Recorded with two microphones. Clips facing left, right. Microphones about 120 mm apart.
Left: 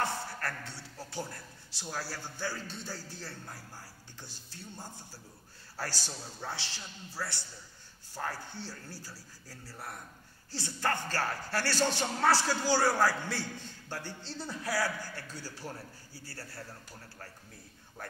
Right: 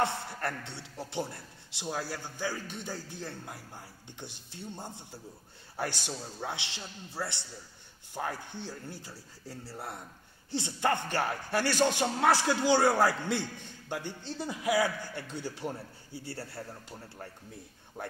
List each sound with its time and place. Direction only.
0.0 s speech: 20° right (ahead or behind)